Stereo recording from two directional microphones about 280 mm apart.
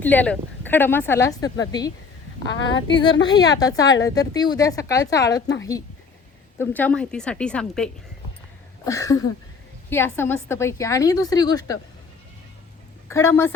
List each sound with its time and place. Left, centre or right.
0.0 s a woman's voice: centre
2.5 s speech: left
3.2 s a woman's voice: centre
6.6 s a woman's voice: centre
8.8 s a sound: centre
9.9 s a woman's voice: centre
13.1 s a woman's voice: centre